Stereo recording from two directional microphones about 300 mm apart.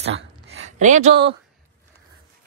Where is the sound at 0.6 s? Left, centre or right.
Right.